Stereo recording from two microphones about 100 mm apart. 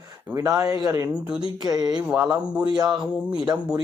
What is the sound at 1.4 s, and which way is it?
Speech, 45° right (ahead or behind).